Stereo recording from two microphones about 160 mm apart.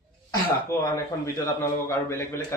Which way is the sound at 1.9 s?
15° left (ahead or behind).